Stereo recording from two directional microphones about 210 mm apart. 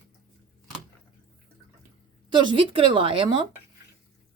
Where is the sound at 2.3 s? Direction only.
25° right (ahead or behind).